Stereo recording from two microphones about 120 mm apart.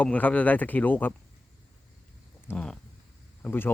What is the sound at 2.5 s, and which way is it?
Speech, 10° left (ahead or behind).